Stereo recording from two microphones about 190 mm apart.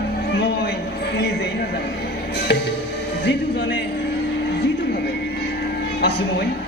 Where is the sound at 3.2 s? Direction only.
65° left (ahead or behind).